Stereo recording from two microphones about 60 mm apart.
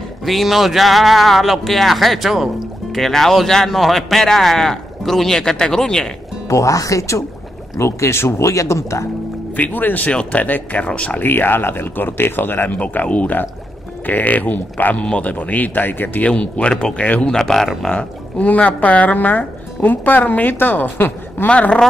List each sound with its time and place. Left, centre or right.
0.2 s speech: centre
6.5 s speech: left
7.8 s speech: left
9.6 s speech: left
12.7 s speech: left
16.3 s speech: centre
17.4 s speech: centre
17.9 s speech: left
21.5 s speech: left